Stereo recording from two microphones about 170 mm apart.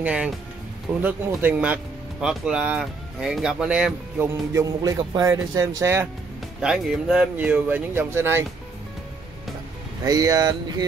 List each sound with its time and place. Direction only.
0.0 s speech: 5° right (ahead or behind)
6.6 s speech: 5° right (ahead or behind)
10.0 s speech: 20° right (ahead or behind)